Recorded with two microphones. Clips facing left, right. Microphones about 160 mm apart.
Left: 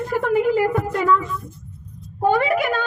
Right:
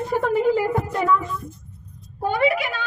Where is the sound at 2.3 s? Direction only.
45° left (ahead or behind).